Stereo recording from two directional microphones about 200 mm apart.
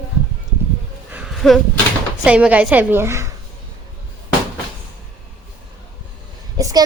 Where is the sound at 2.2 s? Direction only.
5° right (ahead or behind).